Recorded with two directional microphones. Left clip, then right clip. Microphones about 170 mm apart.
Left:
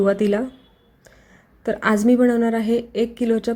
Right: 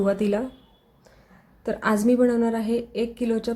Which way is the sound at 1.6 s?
15° left (ahead or behind).